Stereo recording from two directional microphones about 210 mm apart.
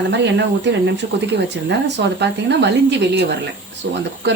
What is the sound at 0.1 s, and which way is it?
Speech, 55° right (ahead or behind).